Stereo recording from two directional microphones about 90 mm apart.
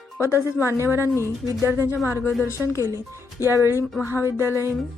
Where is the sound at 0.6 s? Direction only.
30° right (ahead or behind).